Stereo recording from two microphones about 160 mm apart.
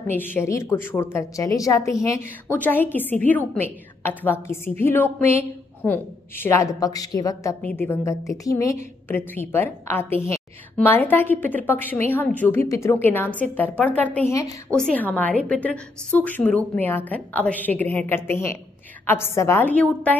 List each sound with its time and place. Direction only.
0.1 s a woman's voice: 10° left (ahead or behind)